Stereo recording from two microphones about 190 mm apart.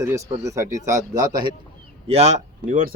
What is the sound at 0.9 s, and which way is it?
Speech, 20° right (ahead or behind).